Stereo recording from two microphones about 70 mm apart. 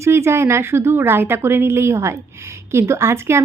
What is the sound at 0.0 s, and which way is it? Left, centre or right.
A woman's voice, right.